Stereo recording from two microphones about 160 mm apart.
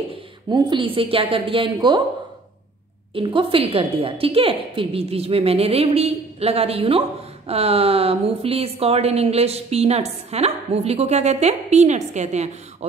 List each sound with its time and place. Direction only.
0.1 s a woman's voice: 30° right (ahead or behind)
3.2 s a woman's voice: 35° right (ahead or behind)